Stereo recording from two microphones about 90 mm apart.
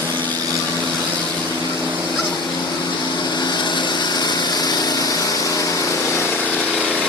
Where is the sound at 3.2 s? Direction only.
50° left (ahead or behind); by 7.0 s 15° left (ahead or behind).